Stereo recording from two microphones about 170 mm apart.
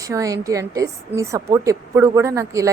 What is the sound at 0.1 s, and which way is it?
A woman's voice, 20° right (ahead or behind).